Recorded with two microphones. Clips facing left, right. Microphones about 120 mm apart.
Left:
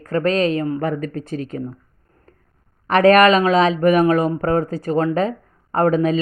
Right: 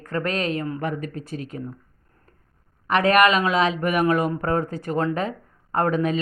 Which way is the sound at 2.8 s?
40° left (ahead or behind).